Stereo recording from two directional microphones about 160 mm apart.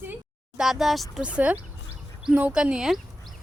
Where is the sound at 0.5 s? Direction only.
Centre (ahead or behind).